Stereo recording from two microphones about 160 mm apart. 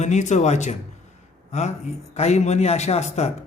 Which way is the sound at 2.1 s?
45° left (ahead or behind).